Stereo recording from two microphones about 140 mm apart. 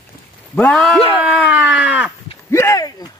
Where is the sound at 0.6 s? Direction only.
5° left (ahead or behind).